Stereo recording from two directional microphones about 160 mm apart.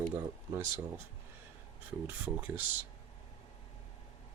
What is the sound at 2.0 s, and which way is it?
Speech, 10° right (ahead or behind).